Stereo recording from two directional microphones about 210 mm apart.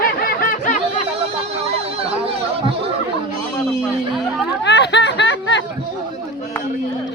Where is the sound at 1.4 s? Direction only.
30° right (ahead or behind).